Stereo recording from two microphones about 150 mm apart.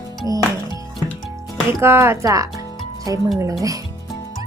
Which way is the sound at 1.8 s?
15° right (ahead or behind).